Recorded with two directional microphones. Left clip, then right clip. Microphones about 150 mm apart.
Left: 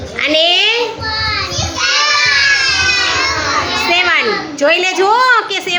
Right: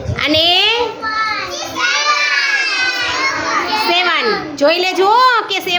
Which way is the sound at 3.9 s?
15° right (ahead or behind).